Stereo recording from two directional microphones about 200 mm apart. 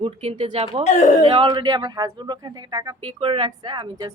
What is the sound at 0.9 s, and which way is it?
Speech, 35° left (ahead or behind).